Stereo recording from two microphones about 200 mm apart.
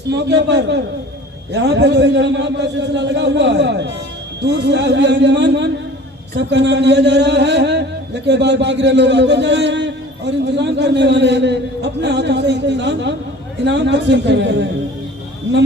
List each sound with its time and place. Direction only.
0.1 s a man's voice: 60° right (ahead or behind)